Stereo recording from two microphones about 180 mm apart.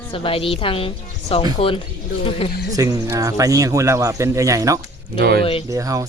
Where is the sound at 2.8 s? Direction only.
20° right (ahead or behind).